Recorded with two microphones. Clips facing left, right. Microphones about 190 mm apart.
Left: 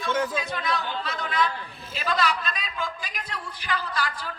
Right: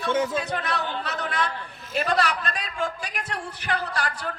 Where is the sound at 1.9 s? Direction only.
50° right (ahead or behind).